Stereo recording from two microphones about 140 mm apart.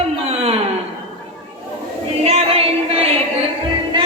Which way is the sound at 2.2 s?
45° right (ahead or behind).